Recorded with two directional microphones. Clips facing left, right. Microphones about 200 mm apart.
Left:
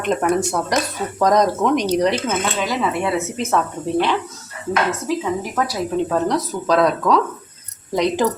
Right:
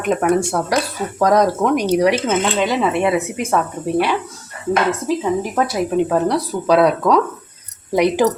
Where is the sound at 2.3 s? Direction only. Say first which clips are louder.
Right 4 dB; 25° right (ahead or behind).